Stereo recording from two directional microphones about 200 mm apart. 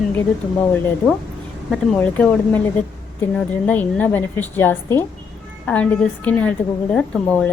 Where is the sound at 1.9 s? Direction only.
10° left (ahead or behind).